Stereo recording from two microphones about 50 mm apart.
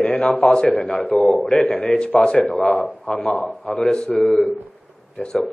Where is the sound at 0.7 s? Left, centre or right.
Left.